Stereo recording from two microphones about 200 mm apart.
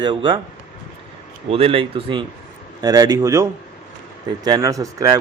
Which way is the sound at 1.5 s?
30° right (ahead or behind).